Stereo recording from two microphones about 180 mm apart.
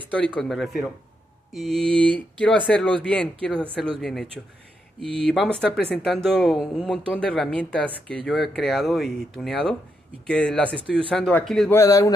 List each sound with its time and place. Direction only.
0.1 s speech: 5° left (ahead or behind)
1.7 s a sound: 30° right (ahead or behind)
2.0 s speech: 5° left (ahead or behind)
5.3 s speech: centre (ahead or behind)
11.7 s speech: 20° left (ahead or behind)